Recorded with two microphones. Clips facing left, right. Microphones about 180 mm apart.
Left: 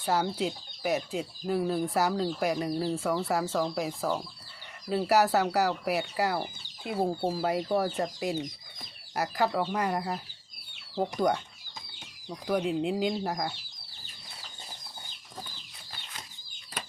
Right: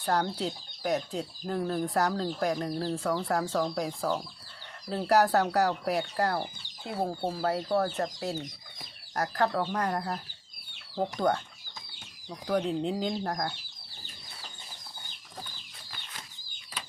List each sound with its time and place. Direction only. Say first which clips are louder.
0.0 s speech: left 1 dB; 5° left (ahead or behind)
12.5 s speech: left 1 dB; 10° left (ahead or behind)